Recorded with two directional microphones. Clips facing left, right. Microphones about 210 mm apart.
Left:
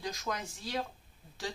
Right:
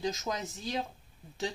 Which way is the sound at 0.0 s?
20° right (ahead or behind).